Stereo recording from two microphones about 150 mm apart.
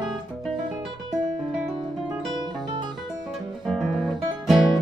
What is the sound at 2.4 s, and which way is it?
Music, 30° right (ahead or behind).